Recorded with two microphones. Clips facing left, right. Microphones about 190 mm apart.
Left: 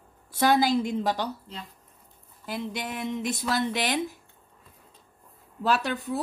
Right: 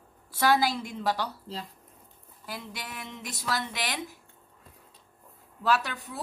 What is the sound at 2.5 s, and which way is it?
A woman's voice, 25° left (ahead or behind).